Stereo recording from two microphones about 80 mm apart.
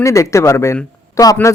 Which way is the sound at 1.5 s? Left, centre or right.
Left.